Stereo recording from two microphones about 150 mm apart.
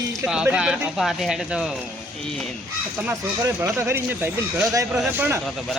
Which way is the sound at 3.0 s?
20° right (ahead or behind).